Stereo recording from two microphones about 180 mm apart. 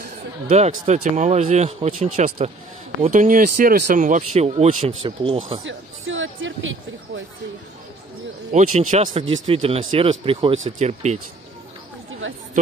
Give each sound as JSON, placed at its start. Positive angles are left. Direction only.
{"t": 0.5, "sound": "speech", "side_deg": -40}
{"t": 3.1, "sound": "speech", "side_deg": -50}
{"t": 5.7, "sound": "music", "side_deg": -90}
{"t": 8.5, "sound": "speech", "side_deg": -40}